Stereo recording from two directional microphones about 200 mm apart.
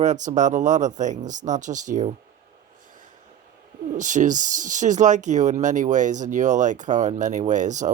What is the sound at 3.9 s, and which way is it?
Speech, 40° right (ahead or behind).